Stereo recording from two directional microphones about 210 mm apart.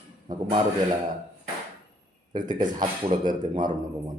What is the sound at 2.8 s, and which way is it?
Speech, 35° right (ahead or behind).